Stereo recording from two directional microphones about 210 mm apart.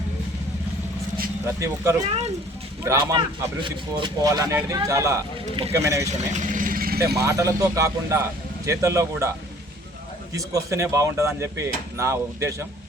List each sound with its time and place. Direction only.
1.5 s speech: 15° right (ahead or behind)
6.3 s speech: 35° right (ahead or behind)
7.3 s speech: 15° right (ahead or behind)
10.3 s speech: 15° right (ahead or behind)